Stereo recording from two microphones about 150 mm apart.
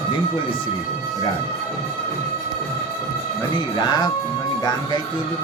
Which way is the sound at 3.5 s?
30° left (ahead or behind).